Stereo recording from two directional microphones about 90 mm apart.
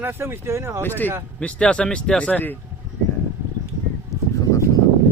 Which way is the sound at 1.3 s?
10° left (ahead or behind).